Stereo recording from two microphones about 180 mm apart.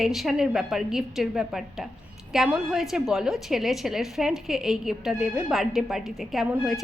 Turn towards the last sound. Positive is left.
turn(degrees=0)  # may be behind; listen again after turning